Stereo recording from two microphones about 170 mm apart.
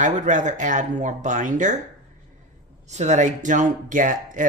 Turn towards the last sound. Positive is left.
turn(degrees=-50)  # may be behind; listen again after turning